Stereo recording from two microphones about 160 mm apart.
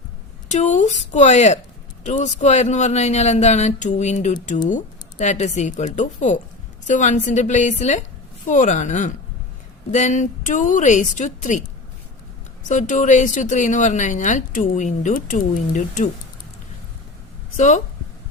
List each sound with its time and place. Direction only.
0.5 s speech: 45° left (ahead or behind)
12.6 s speech: 50° left (ahead or behind)
17.6 s speech: 50° left (ahead or behind)